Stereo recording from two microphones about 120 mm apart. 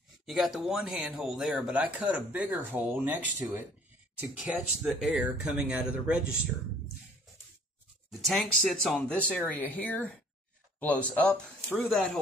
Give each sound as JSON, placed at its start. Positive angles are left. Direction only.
{"t": 0.3, "sound": "speech", "side_deg": 0}
{"t": 8.1, "sound": "speech", "side_deg": 0}